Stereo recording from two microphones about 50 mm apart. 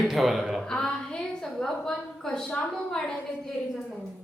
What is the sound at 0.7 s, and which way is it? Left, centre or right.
Speech, centre.